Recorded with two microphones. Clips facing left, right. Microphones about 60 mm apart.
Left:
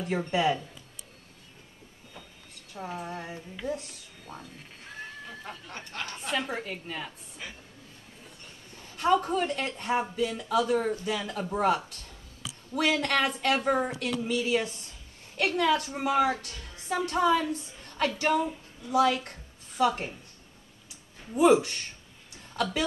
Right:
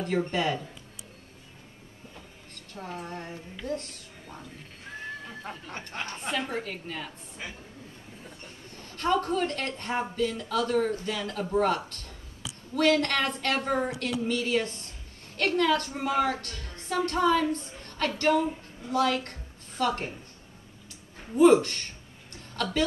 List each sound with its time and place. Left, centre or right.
0.3 s speech: centre
2.7 s speech: centre
5.4 s speech: right
6.3 s a woman's voice: centre
8.7 s a woman's voice: centre
21.4 s speech: centre
22.3 s a sound: centre